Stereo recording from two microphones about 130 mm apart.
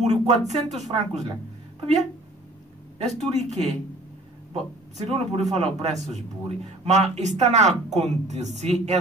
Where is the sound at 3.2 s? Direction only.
60° right (ahead or behind).